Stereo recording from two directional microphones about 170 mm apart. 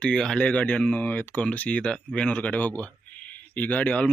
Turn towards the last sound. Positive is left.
turn(degrees=10)  # may be behind; listen again after turning